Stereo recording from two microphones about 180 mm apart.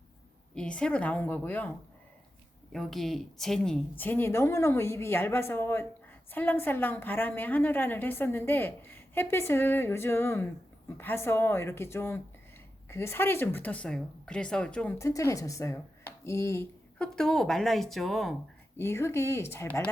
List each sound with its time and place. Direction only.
0.5 s a woman's voice: 5° left (ahead or behind)
2.7 s a woman's voice: centre (ahead or behind)
14.9 s a woman's voice: 15° left (ahead or behind)
17.0 s speech: 5° left (ahead or behind)
18.8 s a woman's voice: 15° left (ahead or behind)